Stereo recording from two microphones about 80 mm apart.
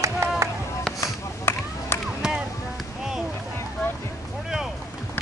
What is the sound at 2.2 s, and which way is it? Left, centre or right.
Music, centre.